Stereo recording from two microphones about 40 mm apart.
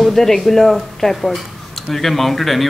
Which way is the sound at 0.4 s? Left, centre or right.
Centre.